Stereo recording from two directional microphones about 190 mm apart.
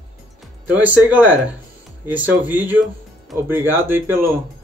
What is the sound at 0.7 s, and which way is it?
A man's voice, 10° right (ahead or behind).